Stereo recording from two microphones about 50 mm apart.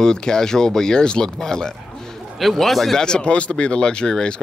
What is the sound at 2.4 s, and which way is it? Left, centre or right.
Speech, centre.